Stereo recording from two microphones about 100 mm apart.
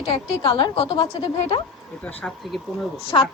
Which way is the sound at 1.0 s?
90° left.